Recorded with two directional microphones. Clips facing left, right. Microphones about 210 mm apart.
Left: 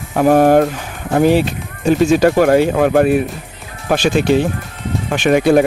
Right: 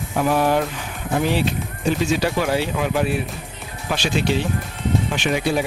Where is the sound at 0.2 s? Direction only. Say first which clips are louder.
Left 9 dB; 50° left (ahead or behind).